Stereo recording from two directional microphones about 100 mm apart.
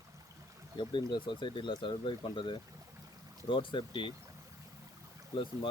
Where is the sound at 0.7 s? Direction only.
55° left (ahead or behind).